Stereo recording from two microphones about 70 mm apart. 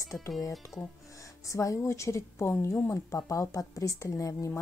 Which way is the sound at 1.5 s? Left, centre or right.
Left.